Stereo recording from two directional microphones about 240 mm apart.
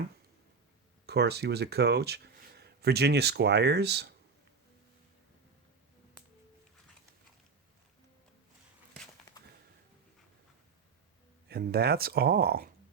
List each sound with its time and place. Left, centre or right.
1.0 s speech: right
11.4 s speech: right